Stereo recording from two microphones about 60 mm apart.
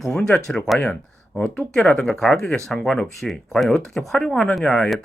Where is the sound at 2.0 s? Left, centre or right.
Centre.